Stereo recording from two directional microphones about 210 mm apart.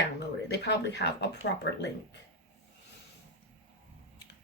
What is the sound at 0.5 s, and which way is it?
Speech, 55° left (ahead or behind).